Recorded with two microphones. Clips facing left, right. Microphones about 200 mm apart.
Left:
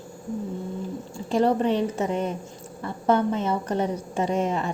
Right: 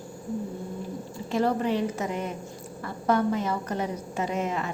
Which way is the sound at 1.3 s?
30° left (ahead or behind).